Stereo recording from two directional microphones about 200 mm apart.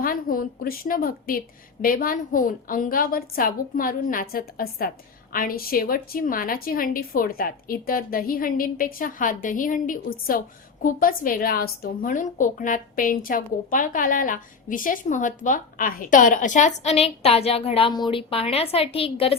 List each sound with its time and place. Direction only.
0.0 s a woman's voice: 45° left (ahead or behind); by 19.4 s 30° left (ahead or behind)